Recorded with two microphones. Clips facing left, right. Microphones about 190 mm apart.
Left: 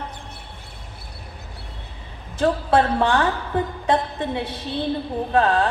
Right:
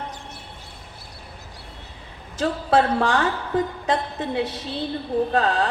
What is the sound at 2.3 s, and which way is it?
Speech, 60° left (ahead or behind).